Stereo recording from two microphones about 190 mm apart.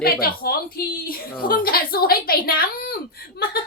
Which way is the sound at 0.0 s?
55° left (ahead or behind).